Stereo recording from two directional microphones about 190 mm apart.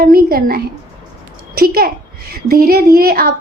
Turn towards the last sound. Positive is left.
turn(degrees=-50)  # may be behind; listen again after turning